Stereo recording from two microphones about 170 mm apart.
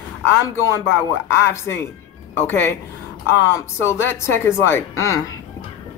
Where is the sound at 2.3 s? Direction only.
10° left (ahead or behind).